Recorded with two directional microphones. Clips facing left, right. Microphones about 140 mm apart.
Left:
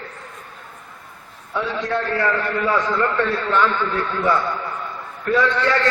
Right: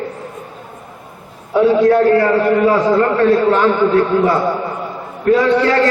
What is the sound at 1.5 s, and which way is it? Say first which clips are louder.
A man's voice: right 13 dB; 40° right (ahead or behind).